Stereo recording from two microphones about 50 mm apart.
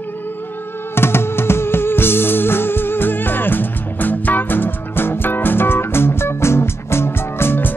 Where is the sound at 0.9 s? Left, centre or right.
Left.